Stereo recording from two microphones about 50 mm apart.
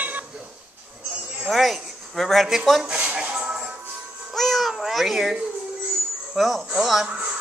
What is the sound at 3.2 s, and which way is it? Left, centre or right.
Music, right.